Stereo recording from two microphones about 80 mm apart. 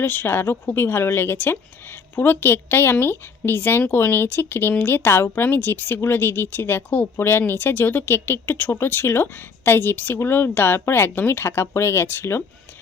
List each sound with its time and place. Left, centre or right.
0.0 s speech: left